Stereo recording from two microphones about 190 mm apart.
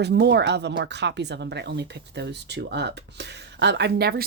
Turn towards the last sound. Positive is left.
turn(degrees=-60)  # may be behind; listen again after turning